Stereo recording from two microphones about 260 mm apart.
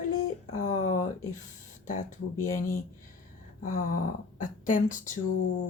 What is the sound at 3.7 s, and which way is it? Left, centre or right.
A woman's voice, left.